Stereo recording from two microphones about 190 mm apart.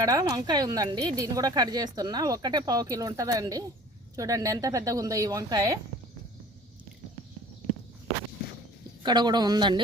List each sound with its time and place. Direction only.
0.0 s speech: 20° right (ahead or behind)
9.0 s speech: 20° right (ahead or behind)